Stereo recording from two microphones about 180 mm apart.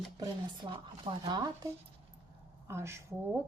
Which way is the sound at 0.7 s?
30° right (ahead or behind).